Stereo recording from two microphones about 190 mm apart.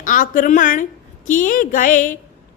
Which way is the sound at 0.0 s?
45° left (ahead or behind).